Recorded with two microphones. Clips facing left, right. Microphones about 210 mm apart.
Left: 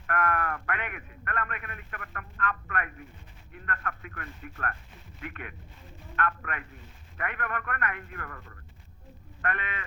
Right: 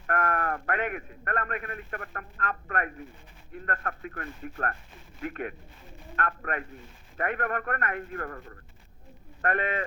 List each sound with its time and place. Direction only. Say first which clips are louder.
0.1 s speech: right 1 dB; 40° right (ahead or behind)